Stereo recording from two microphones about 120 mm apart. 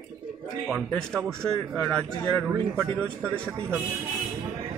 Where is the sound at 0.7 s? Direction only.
5° left (ahead or behind).